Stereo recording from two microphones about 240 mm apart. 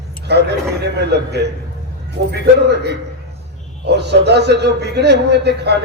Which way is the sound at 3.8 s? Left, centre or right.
Right.